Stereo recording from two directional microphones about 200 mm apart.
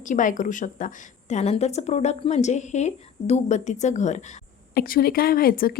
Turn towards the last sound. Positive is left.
turn(degrees=45)  # may be behind; listen again after turning